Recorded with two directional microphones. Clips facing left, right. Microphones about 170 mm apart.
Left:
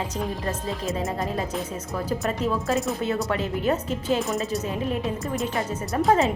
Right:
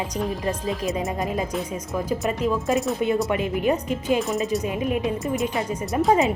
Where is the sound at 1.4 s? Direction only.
Centre (ahead or behind).